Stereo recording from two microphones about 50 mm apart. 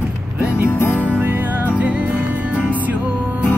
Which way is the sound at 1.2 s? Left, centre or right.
Right.